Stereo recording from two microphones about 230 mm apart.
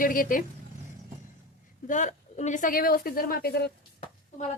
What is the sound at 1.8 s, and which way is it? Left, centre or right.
A woman's voice, left.